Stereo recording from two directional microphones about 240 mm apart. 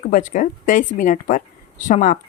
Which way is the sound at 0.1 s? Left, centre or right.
Left.